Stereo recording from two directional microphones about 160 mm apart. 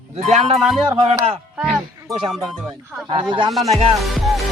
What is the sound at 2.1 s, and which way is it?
Speech, centre (ahead or behind).